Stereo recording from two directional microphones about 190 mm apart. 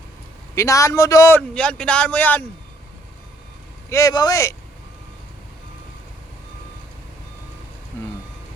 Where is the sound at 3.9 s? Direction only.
20° left (ahead or behind).